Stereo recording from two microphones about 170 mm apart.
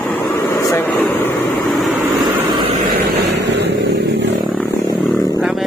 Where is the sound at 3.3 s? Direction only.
90° right.